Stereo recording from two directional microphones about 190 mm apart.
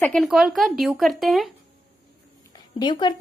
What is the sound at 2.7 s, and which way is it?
Speech, 25° left (ahead or behind).